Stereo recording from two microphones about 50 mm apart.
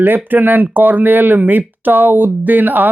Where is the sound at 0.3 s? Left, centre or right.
Right.